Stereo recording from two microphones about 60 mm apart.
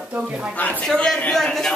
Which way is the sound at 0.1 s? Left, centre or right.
Centre.